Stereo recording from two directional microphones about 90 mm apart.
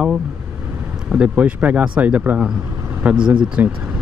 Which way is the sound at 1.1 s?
15° right (ahead or behind).